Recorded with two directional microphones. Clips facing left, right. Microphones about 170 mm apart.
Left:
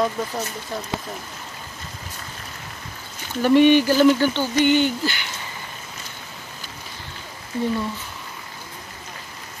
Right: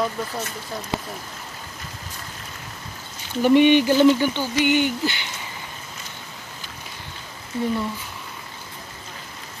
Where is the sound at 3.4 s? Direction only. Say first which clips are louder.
Left 1 dB; 15° right (ahead or behind).